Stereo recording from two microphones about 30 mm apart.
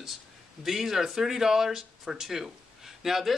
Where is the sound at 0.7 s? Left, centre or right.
Centre.